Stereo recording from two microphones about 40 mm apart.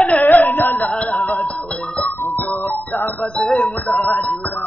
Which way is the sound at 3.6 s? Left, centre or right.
Left.